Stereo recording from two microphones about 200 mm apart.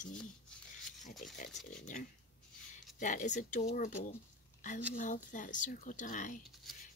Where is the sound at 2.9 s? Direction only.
40° left (ahead or behind).